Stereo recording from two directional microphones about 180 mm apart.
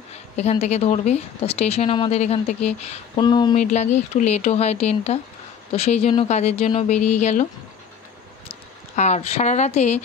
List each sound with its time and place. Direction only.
0.4 s a woman's voice: 35° left (ahead or behind)
3.2 s speech: 25° left (ahead or behind)
3.5 s a woman's voice: 40° left (ahead or behind)
8.5 s speech: 40° left (ahead or behind)